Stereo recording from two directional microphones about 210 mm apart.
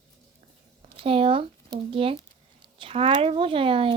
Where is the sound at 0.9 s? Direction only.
25° right (ahead or behind).